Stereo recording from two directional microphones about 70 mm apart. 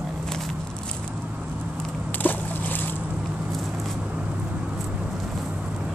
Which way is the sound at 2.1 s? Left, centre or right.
Left.